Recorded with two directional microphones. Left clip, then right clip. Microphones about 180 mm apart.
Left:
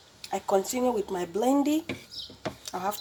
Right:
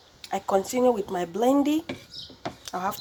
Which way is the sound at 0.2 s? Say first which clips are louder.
Right 1 dB; 15° right (ahead or behind).